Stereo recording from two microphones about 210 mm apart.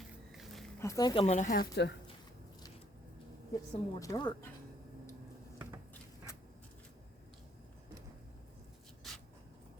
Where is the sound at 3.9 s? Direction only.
20° left (ahead or behind).